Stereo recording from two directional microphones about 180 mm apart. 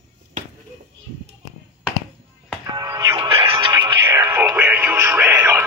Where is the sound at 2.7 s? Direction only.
25° right (ahead or behind).